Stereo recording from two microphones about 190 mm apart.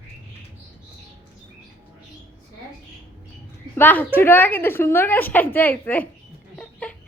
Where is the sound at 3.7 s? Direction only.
10° left (ahead or behind).